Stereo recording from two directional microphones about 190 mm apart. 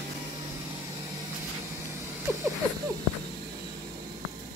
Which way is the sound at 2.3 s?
10° right (ahead or behind).